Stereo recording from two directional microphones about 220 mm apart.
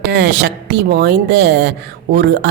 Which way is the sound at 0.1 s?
50° right (ahead or behind).